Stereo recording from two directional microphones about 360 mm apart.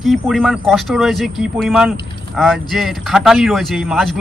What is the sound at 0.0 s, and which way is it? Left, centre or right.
Speech, centre.